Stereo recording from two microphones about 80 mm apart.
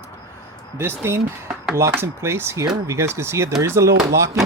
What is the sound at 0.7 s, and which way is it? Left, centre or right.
Speech, right.